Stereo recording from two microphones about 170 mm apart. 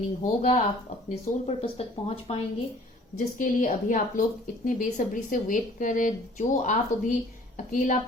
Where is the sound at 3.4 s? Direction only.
50° left (ahead or behind).